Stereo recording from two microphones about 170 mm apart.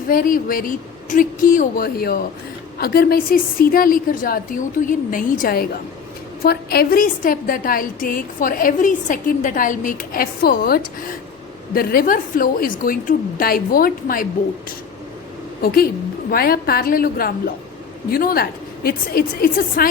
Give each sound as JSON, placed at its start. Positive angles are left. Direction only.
{"t": 0.1, "sound": "a woman's voice", "side_deg": 55}
{"t": 15.6, "sound": "a woman's voice", "side_deg": 65}